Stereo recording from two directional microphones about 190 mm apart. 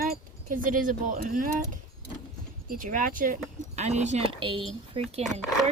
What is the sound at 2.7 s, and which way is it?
Speech, 45° right (ahead or behind).